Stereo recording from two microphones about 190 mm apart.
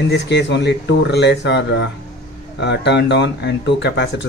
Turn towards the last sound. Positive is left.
turn(degrees=65)  # may be behind; listen again after turning